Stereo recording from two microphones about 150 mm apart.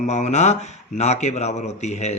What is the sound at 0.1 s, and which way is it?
A man's voice, 50° left (ahead or behind).